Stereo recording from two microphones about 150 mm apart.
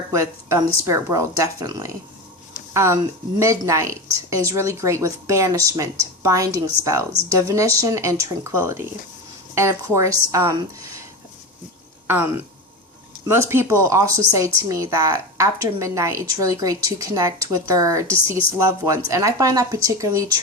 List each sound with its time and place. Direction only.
0.1 s a woman's voice: 20° right (ahead or behind)
12.0 s a woman's voice: 15° right (ahead or behind)
19.1 s a woman's voice: 25° right (ahead or behind)